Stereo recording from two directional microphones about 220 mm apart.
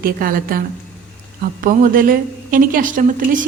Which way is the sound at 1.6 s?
40° right (ahead or behind).